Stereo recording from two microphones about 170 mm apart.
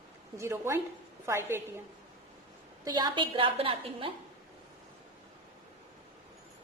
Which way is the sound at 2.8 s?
25° right (ahead or behind).